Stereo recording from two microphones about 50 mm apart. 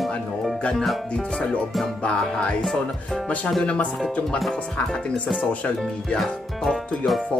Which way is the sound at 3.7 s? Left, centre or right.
Left.